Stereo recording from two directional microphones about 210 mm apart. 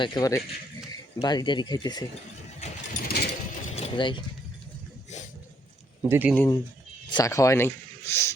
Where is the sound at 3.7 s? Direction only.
25° left (ahead or behind).